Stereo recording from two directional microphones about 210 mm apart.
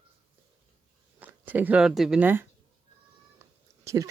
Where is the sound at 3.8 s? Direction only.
15° right (ahead or behind).